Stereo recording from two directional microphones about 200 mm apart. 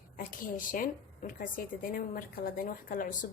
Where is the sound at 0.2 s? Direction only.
45° left (ahead or behind).